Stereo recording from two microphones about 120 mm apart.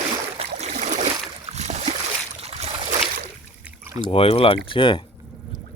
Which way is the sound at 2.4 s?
60° right (ahead or behind).